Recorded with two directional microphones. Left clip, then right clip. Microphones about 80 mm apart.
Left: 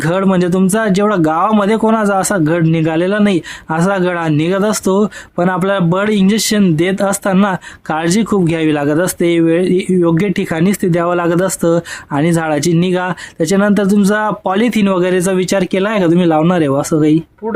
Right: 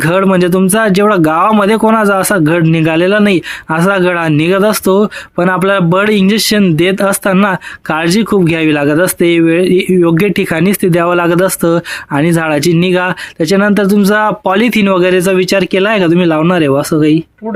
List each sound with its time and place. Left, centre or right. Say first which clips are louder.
0.0 s speech: right 4 dB; right